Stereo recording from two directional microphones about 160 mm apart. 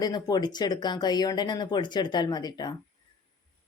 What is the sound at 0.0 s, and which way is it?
Speech, 25° left (ahead or behind).